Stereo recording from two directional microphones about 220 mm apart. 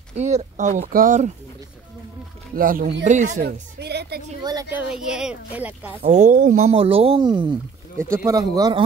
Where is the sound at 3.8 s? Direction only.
50° right (ahead or behind).